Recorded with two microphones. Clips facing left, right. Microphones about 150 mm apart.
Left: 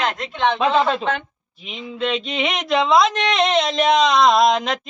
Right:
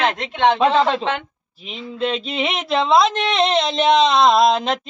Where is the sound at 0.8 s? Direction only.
30° right (ahead or behind).